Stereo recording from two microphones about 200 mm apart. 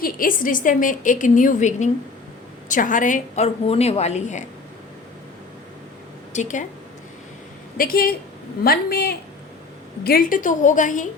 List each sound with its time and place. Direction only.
0.0 s a woman's voice: 45° left (ahead or behind)
6.3 s a woman's voice: 35° left (ahead or behind)
7.8 s a woman's voice: 45° left (ahead or behind)